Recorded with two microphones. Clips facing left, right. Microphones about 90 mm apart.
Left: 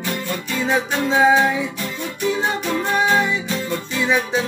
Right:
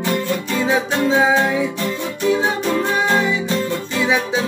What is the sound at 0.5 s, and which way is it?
Music, centre (ahead or behind).